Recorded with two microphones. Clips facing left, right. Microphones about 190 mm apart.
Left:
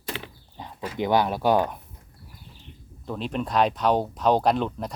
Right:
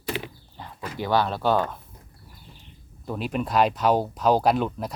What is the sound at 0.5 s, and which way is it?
Speech, 20° left (ahead or behind).